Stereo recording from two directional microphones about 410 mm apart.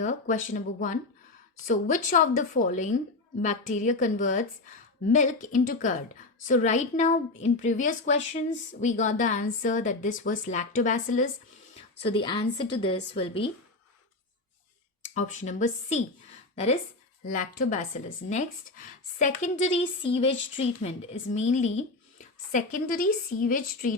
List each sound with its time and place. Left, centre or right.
0.0 s a woman's voice: centre
15.1 s a woman's voice: centre
17.2 s a woman's voice: centre
19.4 s a woman's voice: centre